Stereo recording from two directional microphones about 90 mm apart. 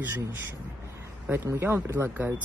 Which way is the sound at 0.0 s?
25° right (ahead or behind).